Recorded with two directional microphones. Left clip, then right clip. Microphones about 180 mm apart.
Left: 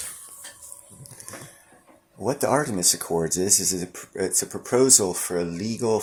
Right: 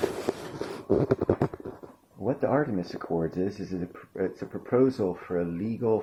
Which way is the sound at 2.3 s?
10° left (ahead or behind).